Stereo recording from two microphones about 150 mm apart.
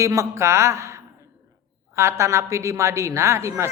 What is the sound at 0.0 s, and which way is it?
A woman's voice, 20° right (ahead or behind).